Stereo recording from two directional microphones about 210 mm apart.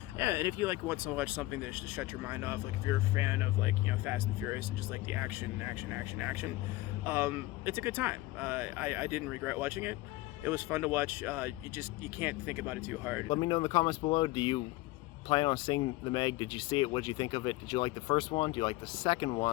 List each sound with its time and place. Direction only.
0.2 s speech: 10° right (ahead or behind)
13.2 s speech: 20° left (ahead or behind)